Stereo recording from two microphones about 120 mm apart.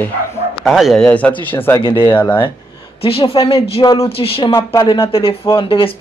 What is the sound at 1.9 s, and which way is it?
Speech, 40° left (ahead or behind).